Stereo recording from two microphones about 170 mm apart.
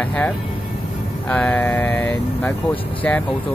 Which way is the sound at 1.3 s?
10° left (ahead or behind).